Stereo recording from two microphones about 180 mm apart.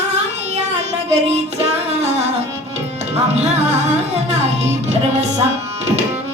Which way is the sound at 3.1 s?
40° right (ahead or behind).